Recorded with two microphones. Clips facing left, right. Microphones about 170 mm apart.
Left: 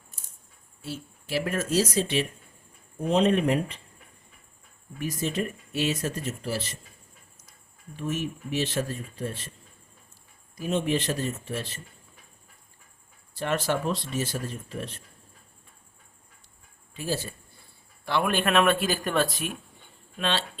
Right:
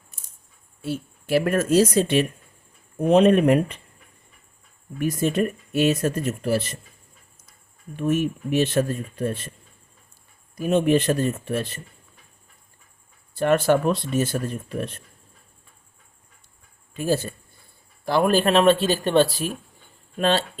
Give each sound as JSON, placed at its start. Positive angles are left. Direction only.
{"t": 0.8, "sound": "speech", "side_deg": -55}
{"t": 4.9, "sound": "speech", "side_deg": -55}
{"t": 7.9, "sound": "speech", "side_deg": -55}
{"t": 10.6, "sound": "speech", "side_deg": -55}
{"t": 13.3, "sound": "speech", "side_deg": -55}
{"t": 16.9, "sound": "speech", "side_deg": -50}
{"t": 18.0, "sound": "speech", "side_deg": -40}
{"t": 20.1, "sound": "speech", "side_deg": -45}